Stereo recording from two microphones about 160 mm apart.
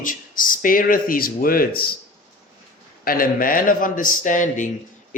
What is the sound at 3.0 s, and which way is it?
Speech, 65° left (ahead or behind).